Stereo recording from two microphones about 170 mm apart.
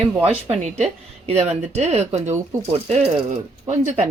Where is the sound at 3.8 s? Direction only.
45° right (ahead or behind).